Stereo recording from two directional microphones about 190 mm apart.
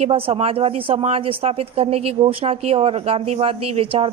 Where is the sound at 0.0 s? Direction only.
30° right (ahead or behind).